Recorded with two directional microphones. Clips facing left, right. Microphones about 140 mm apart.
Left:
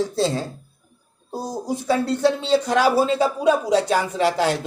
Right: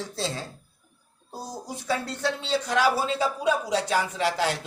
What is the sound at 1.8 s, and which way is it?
Speech, 40° left (ahead or behind).